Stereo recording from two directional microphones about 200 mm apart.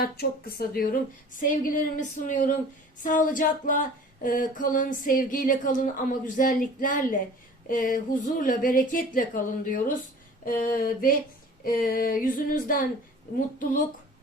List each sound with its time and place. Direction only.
0.0 s female singing: 50° left (ahead or behind)
1.4 s a woman's voice: 45° left (ahead or behind)
3.0 s female singing: 40° left (ahead or behind)